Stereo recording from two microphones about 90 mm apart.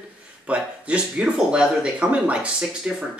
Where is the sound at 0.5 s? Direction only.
15° right (ahead or behind).